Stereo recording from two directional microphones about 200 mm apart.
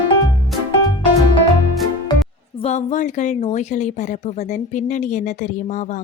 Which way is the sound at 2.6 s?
35° left (ahead or behind).